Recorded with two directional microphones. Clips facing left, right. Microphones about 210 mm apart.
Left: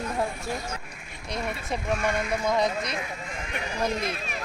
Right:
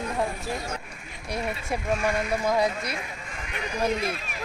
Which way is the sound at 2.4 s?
5° right (ahead or behind).